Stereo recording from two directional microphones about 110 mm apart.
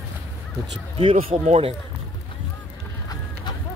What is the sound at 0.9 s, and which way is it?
Speech, 60° right (ahead or behind).